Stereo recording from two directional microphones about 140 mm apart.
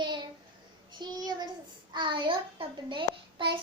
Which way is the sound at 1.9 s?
35° right (ahead or behind).